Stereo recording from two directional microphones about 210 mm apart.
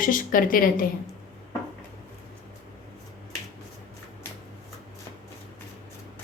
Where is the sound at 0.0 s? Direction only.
40° left (ahead or behind).